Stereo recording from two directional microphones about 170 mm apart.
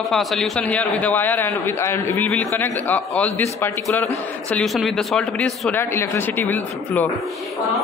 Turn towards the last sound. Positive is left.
turn(degrees=10)  # may be behind; listen again after turning